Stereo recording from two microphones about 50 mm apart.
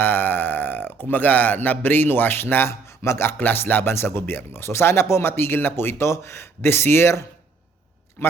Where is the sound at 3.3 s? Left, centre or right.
Left.